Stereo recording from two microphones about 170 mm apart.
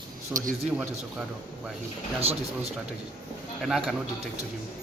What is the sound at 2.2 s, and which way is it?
Speech, 35° right (ahead or behind).